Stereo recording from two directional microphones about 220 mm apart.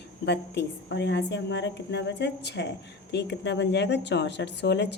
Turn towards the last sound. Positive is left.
turn(degrees=50)  # may be behind; listen again after turning